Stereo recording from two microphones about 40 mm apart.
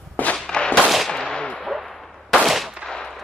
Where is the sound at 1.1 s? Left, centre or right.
Left.